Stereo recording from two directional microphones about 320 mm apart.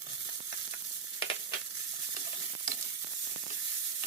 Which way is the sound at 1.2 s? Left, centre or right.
Left.